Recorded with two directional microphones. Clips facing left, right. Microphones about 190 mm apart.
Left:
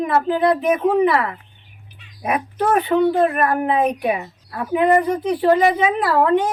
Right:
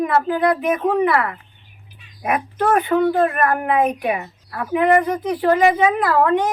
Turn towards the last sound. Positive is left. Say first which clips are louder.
# right 1 dB
turn(degrees=25)  # may be behind; listen again after turning